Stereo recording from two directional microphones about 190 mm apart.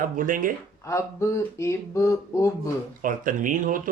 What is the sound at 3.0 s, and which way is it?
Speech, 45° right (ahead or behind).